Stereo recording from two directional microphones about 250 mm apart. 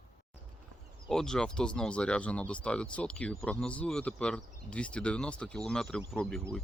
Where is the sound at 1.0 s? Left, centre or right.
Centre.